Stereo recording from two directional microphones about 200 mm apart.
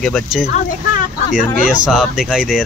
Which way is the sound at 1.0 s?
40° left (ahead or behind).